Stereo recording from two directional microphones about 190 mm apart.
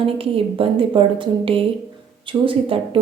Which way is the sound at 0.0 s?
30° right (ahead or behind).